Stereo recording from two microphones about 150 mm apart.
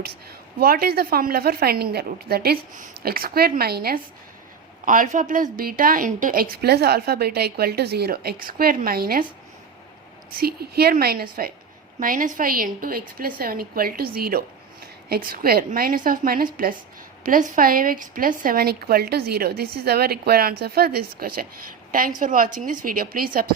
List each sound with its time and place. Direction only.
0.6 s a woman's voice: 90° right
4.9 s a woman's voice: 60° right (ahead or behind); by 9.2 s 85° right
10.3 s a woman's voice: 90° right
11.9 s a woman's voice: 65° right (ahead or behind); by 14.4 s 90° right
15.1 s a woman's voice: 75° right (ahead or behind)
22.2 s a woman's voice: 60° right (ahead or behind)